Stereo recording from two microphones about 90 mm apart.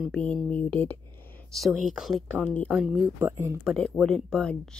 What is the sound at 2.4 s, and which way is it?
Speech, 15° left (ahead or behind).